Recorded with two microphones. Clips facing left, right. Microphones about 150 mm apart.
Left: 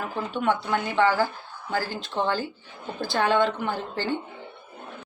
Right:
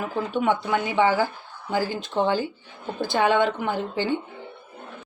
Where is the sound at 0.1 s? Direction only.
15° right (ahead or behind).